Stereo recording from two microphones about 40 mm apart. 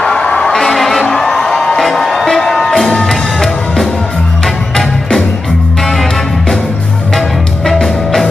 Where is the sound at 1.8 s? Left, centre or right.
Centre.